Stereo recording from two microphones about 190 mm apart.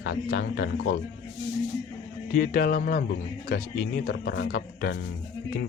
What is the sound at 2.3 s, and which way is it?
Speech, 45° left (ahead or behind).